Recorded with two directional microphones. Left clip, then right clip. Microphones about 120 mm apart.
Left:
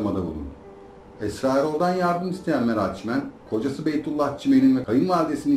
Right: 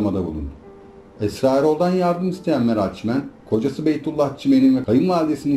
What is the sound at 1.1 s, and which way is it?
Speech, 40° right (ahead or behind).